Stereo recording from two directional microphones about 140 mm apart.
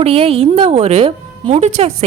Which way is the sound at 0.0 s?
45° right (ahead or behind).